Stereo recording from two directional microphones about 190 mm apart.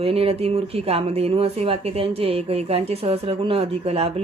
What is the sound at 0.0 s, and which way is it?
A woman's voice, 30° right (ahead or behind).